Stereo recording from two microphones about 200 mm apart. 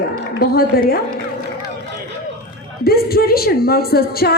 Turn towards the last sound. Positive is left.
turn(degrees=50)  # may be behind; listen again after turning